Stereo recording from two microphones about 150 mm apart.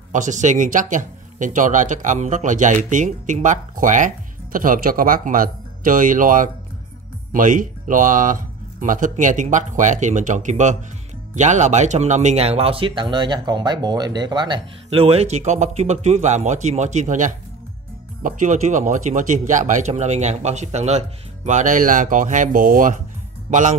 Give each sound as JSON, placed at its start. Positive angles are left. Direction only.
{"t": 0.1, "sound": "speech", "side_deg": -55}
{"t": 23.5, "sound": "speech", "side_deg": -55}